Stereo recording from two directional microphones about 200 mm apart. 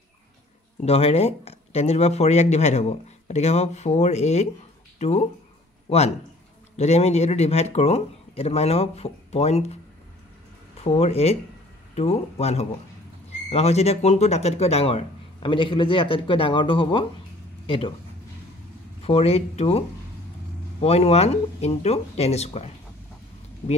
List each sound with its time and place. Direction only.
0.8 s speech: 30° left (ahead or behind)
10.8 s speech: 30° left (ahead or behind)
19.0 s speech: 30° left (ahead or behind)
20.8 s speech: 30° left (ahead or behind)